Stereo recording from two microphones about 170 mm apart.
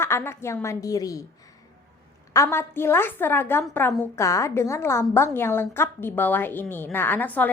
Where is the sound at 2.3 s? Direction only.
15° left (ahead or behind).